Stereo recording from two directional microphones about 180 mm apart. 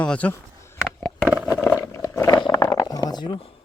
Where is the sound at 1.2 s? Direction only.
5° right (ahead or behind).